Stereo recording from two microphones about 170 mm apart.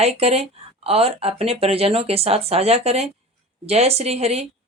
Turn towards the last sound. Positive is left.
turn(degrees=-40)  # may be behind; listen again after turning